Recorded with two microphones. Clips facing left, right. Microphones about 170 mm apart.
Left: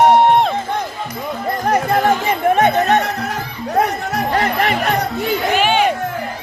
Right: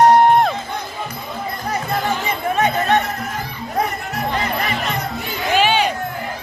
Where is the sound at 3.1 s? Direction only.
75° left (ahead or behind).